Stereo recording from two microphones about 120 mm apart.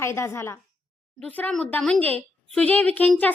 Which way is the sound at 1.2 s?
10° left (ahead or behind).